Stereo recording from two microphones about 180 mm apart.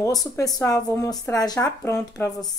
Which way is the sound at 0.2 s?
20° left (ahead or behind).